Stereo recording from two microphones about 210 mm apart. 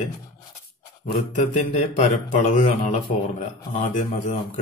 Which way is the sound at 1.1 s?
35° left (ahead or behind).